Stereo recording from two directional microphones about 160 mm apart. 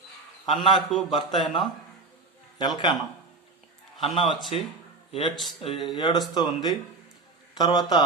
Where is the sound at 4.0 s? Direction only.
35° left (ahead or behind).